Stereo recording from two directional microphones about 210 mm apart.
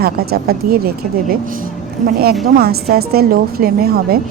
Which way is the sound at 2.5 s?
50° right (ahead or behind).